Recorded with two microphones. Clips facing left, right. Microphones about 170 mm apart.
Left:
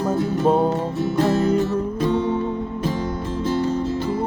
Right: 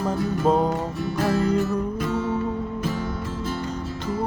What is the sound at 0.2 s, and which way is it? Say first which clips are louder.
Music: left 2 dB; 30° left (ahead or behind).